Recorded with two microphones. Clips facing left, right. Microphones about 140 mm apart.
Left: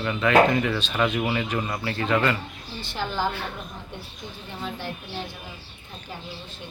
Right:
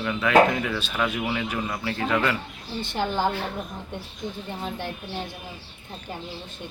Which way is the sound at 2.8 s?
55° right (ahead or behind).